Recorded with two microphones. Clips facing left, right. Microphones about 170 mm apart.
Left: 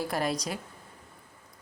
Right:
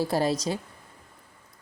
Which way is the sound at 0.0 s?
30° right (ahead or behind).